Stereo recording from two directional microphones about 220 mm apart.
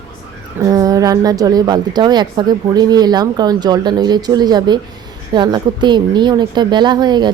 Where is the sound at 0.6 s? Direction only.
15° right (ahead or behind).